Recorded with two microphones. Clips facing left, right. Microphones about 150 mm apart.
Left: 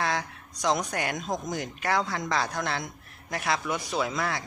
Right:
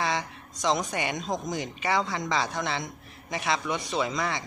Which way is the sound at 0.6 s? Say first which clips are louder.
Even; centre (ahead or behind).